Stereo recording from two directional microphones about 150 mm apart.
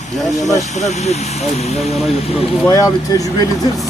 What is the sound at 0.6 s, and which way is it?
Speech, 50° left (ahead or behind).